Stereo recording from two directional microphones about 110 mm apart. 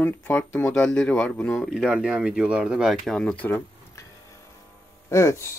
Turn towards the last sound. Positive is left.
turn(degrees=25)  # may be behind; listen again after turning